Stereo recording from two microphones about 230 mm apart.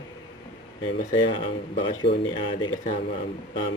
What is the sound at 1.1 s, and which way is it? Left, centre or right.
Speech, left.